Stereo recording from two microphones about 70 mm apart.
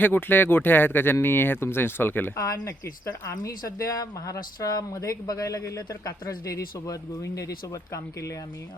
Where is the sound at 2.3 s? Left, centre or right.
Left.